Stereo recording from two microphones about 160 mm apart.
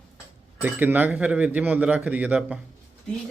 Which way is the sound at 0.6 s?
10° right (ahead or behind).